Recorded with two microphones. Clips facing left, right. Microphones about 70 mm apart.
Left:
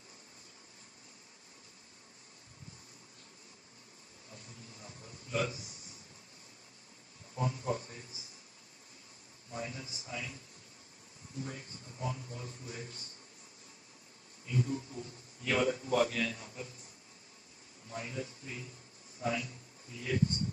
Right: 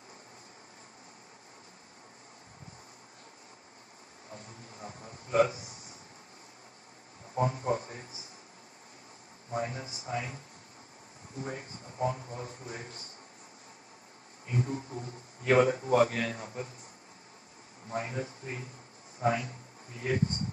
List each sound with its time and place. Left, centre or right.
4.3 s a sound: right
7.3 s a man's voice: right
9.5 s a man's voice: right
14.4 s a man's voice: right
17.8 s a man's voice: right